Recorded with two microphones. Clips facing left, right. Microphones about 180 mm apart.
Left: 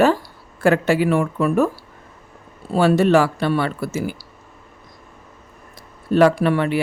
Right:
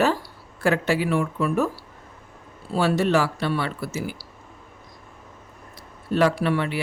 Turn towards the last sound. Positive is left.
turn(degrees=50)  # may be behind; listen again after turning